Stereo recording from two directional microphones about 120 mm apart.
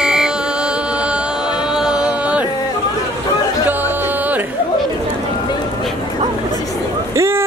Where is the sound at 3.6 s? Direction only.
15° right (ahead or behind).